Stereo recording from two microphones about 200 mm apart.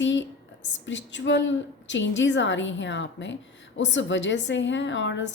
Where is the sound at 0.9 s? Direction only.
65° left (ahead or behind).